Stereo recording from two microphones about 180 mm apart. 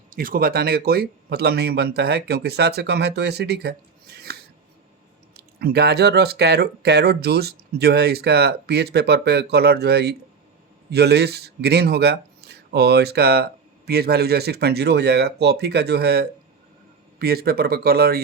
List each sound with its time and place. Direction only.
0.1 s speech: 50° right (ahead or behind)
5.5 s speech: 60° right (ahead or behind)